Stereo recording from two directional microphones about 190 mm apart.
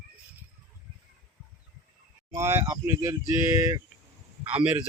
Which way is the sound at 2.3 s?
15° right (ahead or behind).